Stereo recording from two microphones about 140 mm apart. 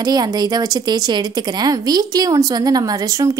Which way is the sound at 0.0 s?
30° right (ahead or behind).